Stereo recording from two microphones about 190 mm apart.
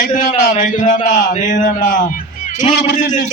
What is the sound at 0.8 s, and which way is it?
Speech, 20° left (ahead or behind).